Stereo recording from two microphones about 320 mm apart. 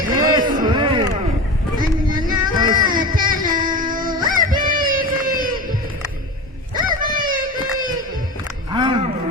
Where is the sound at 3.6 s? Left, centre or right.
Right.